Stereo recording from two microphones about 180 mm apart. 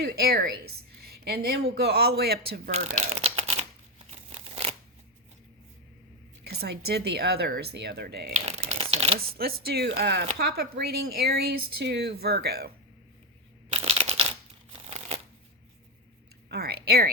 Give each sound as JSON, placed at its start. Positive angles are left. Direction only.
{"t": 0.0, "sound": "a woman's voice", "side_deg": -60}
{"t": 2.7, "sound": "crumpling", "side_deg": -35}
{"t": 6.4, "sound": "speech", "side_deg": -65}
{"t": 8.3, "sound": "speech", "side_deg": -35}
{"t": 9.1, "sound": "speech", "side_deg": -55}
{"t": 13.7, "sound": "a sound", "side_deg": -35}
{"t": 16.5, "sound": "speech", "side_deg": -60}